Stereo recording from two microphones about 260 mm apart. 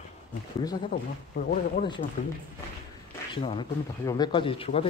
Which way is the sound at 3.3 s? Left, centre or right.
Centre.